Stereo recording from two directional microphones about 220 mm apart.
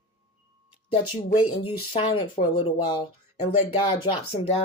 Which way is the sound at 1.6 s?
25° left (ahead or behind).